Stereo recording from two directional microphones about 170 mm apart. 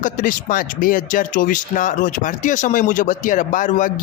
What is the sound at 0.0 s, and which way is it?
Speech, 50° left (ahead or behind).